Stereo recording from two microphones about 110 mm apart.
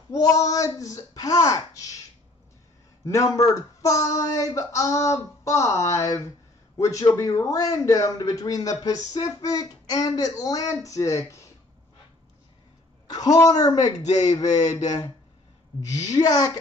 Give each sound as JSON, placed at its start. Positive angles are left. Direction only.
{"t": 0.1, "sound": "a man's voice", "side_deg": 35}
{"t": 3.1, "sound": "a man's voice", "side_deg": 30}
{"t": 13.1, "sound": "a man's voice", "side_deg": 35}
{"t": 14.5, "sound": "a sound", "side_deg": 90}
{"t": 14.8, "sound": "a man's voice", "side_deg": 35}
{"t": 16.1, "sound": "a man's voice", "side_deg": 35}